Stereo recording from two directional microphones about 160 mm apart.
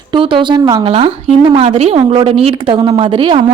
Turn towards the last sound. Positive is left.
turn(degrees=-30)  # may be behind; listen again after turning